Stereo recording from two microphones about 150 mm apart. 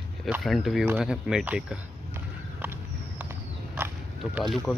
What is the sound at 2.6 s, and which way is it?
Run, 10° right (ahead or behind).